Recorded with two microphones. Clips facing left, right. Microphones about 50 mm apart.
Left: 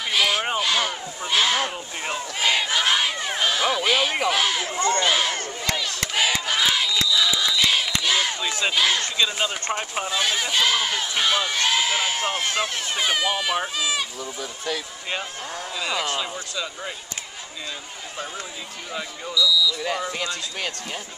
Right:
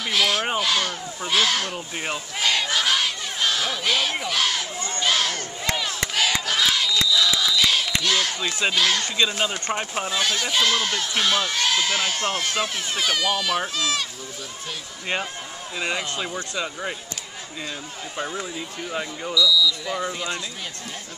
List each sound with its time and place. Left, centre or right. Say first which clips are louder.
0.1 s a sound: even; centre
2.4 s battle cry: left 1 dB; centre
3.3 s speech: left 3 dB; centre
4.7 s speech: left 8 dB; left
5.0 s speech: left 1 dB; centre
5.8 s crowd: right 1 dB; centre
6.1 s battle cry: left 1 dB; centre
8.0 s a sound: even; centre
8.7 s speech: left 1 dB; centre
15.8 s speech: even; right
19.3 s speech: right 1 dB; centre